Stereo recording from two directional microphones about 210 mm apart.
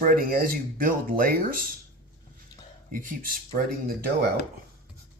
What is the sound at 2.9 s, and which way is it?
Speech, 40° right (ahead or behind).